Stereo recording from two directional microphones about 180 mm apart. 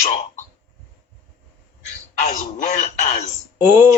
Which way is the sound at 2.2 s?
40° left (ahead or behind).